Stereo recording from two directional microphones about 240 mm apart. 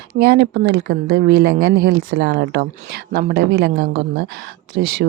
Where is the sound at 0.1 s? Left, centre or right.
Right.